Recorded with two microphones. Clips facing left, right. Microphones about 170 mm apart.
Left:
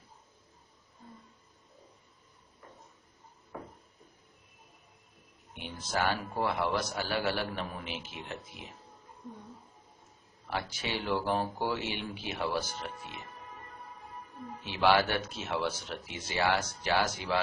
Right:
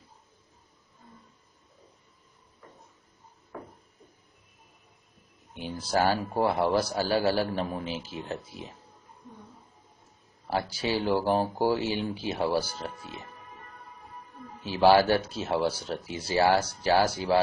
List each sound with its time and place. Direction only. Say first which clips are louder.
5.5 s a man's voice: right 6 dB; 35° right (ahead or behind)
10.4 s a man's voice: right 7 dB; 35° right (ahead or behind)
14.6 s a man's voice: right 6 dB; 35° right (ahead or behind)